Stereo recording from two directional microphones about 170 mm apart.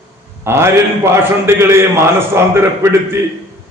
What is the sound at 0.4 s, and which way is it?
A man's voice, 15° right (ahead or behind).